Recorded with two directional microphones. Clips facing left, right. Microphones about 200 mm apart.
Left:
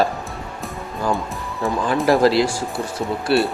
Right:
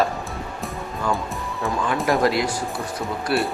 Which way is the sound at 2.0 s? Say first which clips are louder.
Left 5 dB; 30° left (ahead or behind).